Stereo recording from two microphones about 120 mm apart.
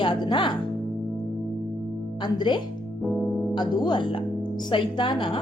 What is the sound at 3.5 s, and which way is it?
A woman's voice, 40° left (ahead or behind).